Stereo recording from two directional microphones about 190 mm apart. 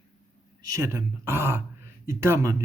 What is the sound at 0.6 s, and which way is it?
Speech, 15° right (ahead or behind).